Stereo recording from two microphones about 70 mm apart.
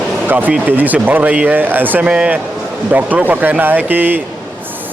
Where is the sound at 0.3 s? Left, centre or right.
Right.